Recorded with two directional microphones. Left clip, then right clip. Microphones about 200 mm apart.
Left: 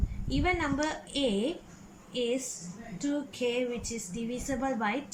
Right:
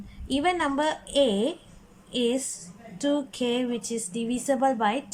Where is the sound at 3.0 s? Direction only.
35° right (ahead or behind).